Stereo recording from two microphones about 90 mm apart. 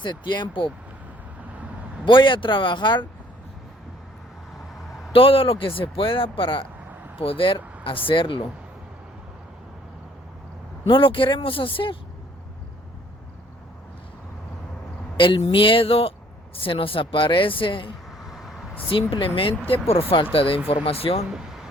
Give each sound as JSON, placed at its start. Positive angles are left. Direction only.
{"t": 0.0, "sound": "speech", "side_deg": 55}
{"t": 2.0, "sound": "speech", "side_deg": 65}
{"t": 4.5, "sound": "vehicle", "side_deg": 0}
{"t": 5.1, "sound": "speech", "side_deg": 90}
{"t": 7.2, "sound": "speech", "side_deg": 80}
{"t": 10.8, "sound": "speech", "side_deg": 70}
{"t": 15.2, "sound": "speech", "side_deg": 70}
{"t": 18.2, "sound": "vehicle", "side_deg": 0}
{"t": 18.9, "sound": "speech", "side_deg": 75}
{"t": 21.2, "sound": "speech", "side_deg": -5}